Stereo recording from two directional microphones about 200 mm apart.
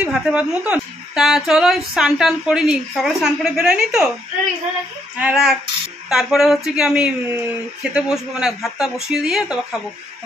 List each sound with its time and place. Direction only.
0.0 s speech: 5° right (ahead or behind)
5.1 s speech: 5° right (ahead or behind)